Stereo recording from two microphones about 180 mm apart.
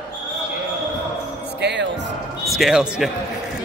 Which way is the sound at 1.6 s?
70° right (ahead or behind).